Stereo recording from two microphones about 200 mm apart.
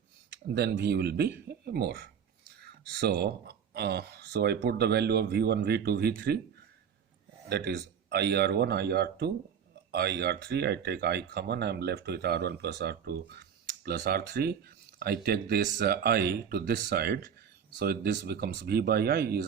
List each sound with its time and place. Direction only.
0.4 s speech: 55° right (ahead or behind)
7.4 s a man's voice: 55° right (ahead or behind)